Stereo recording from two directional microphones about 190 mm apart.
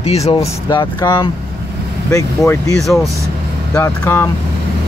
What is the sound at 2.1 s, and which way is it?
Speech, 15° left (ahead or behind).